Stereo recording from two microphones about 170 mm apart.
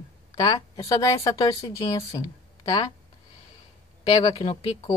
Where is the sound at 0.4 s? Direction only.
20° left (ahead or behind).